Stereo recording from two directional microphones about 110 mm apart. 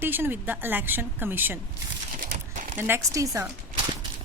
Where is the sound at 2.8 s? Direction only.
20° right (ahead or behind).